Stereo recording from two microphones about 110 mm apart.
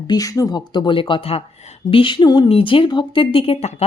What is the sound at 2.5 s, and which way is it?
Speech, 55° left (ahead or behind).